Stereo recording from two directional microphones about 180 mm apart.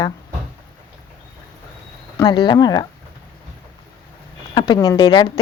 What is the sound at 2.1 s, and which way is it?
Speech, 25° left (ahead or behind).